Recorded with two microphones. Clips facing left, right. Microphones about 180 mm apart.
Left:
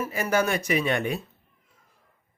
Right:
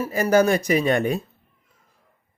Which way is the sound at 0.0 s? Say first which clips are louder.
Right 7 dB; 40° right (ahead or behind).